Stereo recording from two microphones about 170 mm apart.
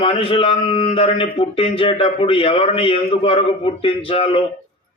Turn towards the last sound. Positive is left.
turn(degrees=35)  # may be behind; listen again after turning